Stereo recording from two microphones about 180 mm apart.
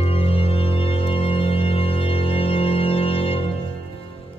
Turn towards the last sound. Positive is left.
turn(degrees=30)  # may be behind; listen again after turning